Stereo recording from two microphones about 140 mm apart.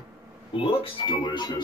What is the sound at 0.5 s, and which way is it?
Speech, 40° left (ahead or behind).